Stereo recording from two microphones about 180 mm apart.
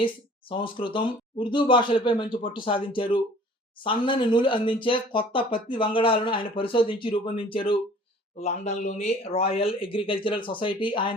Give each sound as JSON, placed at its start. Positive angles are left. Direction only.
{"t": 0.0, "sound": "speech", "side_deg": 30}